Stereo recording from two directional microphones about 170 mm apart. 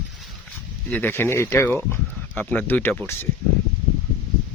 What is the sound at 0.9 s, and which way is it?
Speech, 10° left (ahead or behind).